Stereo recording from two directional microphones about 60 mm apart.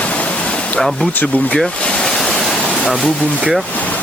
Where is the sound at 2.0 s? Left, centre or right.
Centre.